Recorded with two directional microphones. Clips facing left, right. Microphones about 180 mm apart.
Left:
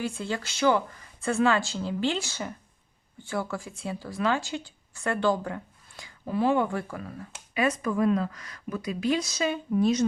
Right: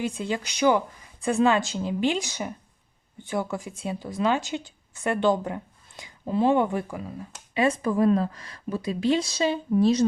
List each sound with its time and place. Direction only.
0.0 s a woman's voice: 20° right (ahead or behind)
7.5 s speech: 30° right (ahead or behind)